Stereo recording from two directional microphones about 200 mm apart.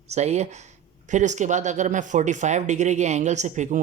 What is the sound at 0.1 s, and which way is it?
A man's voice, 35° right (ahead or behind).